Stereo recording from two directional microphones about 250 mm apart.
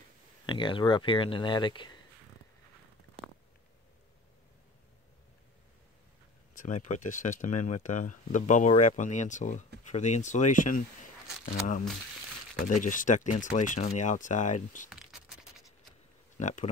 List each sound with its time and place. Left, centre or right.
0.5 s speech: centre
6.6 s speech: left
14.9 s a sound: centre
16.3 s speech: left